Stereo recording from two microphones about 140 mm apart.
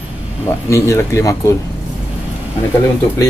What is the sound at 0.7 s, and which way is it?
Speech, 20° left (ahead or behind).